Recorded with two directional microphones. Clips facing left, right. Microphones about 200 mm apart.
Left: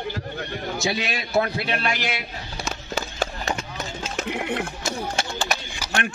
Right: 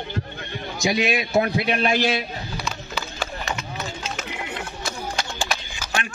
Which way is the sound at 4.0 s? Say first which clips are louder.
Left 4 dB; 55° left (ahead or behind).